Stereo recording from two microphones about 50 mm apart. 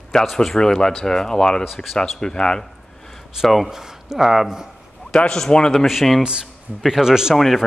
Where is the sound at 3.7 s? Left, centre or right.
Centre.